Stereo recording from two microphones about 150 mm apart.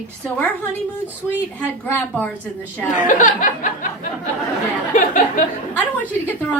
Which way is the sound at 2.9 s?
60° left (ahead or behind).